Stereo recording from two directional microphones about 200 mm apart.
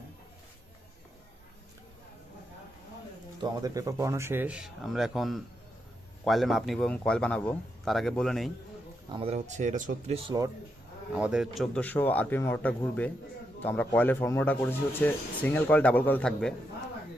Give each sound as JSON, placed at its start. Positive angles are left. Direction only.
{"t": 3.3, "sound": "a man's voice", "side_deg": -20}
{"t": 9.1, "sound": "speech", "side_deg": -30}
{"t": 11.1, "sound": "speech", "side_deg": -5}